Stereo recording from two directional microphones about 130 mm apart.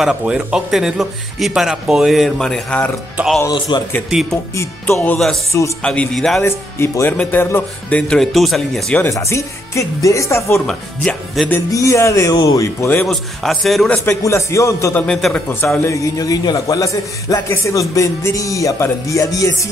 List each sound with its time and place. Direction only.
0.0 s speech: 5° right (ahead or behind)
3.5 s a man's voice: 35° left (ahead or behind)
4.1 s speech: centre (ahead or behind)
4.6 s a man's voice: 20° left (ahead or behind)
5.0 s speech: 5° left (ahead or behind)
6.4 s a man's voice: 20° left (ahead or behind); by 9.0 s 5° left (ahead or behind)
9.0 s a man's voice: 20° left (ahead or behind)
10.7 s speech: 5° left (ahead or behind)
11.7 s a man's voice: 25° left (ahead or behind)
12.9 s speech: 5° left (ahead or behind)
13.9 s a man's voice: 20° left (ahead or behind)
15.0 s speech: 5° left (ahead or behind)
15.9 s a man's voice: 30° left (ahead or behind)